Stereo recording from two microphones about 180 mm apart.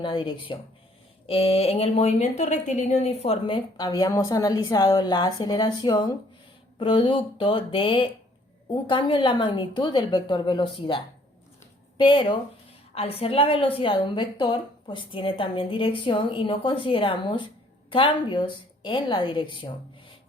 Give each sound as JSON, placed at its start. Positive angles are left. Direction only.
{"t": 0.0, "sound": "speech", "side_deg": 30}